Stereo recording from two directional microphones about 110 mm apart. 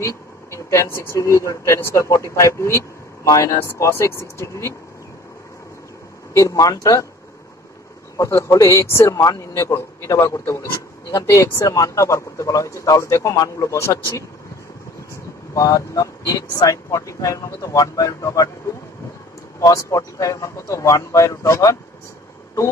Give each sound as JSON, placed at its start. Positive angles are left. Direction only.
{"t": 0.0, "sound": "speech", "side_deg": 25}
{"t": 6.3, "sound": "speech", "side_deg": 30}
{"t": 8.2, "sound": "speech", "side_deg": 25}
{"t": 15.5, "sound": "speech", "side_deg": 30}
{"t": 19.6, "sound": "speech", "side_deg": 30}